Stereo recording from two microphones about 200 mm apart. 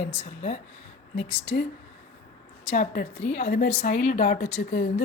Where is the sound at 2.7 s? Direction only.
40° left (ahead or behind).